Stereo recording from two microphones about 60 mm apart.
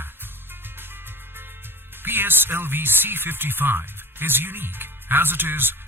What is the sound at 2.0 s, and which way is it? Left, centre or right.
Speech, right.